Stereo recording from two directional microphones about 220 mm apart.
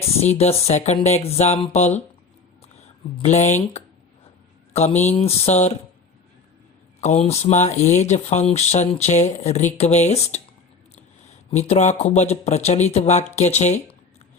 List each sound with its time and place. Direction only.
0.2 s speech: 30° left (ahead or behind)
3.2 s speech: 30° left (ahead or behind)
7.0 s speech: 30° left (ahead or behind)
11.5 s speech: 30° left (ahead or behind)